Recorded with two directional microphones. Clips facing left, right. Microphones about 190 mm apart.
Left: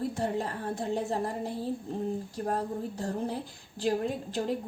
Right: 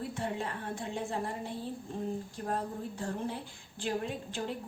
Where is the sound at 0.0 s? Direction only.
40° left (ahead or behind).